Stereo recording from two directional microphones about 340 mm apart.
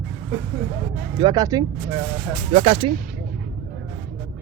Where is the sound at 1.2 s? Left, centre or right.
Centre.